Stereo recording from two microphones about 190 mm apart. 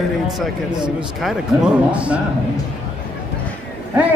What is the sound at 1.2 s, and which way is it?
Speech, 5° right (ahead or behind).